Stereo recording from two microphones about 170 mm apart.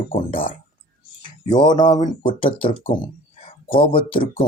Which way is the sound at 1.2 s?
25° left (ahead or behind).